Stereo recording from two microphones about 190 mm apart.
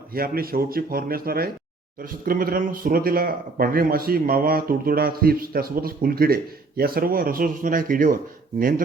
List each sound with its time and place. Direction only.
0.1 s speech: 50° right (ahead or behind)